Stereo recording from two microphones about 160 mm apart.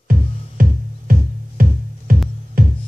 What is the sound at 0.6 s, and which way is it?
Music, 60° right (ahead or behind).